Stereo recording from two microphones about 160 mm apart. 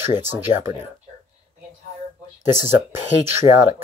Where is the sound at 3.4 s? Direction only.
35° left (ahead or behind).